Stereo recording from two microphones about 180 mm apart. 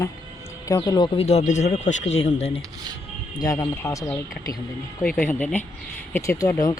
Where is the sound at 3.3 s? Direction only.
20° left (ahead or behind).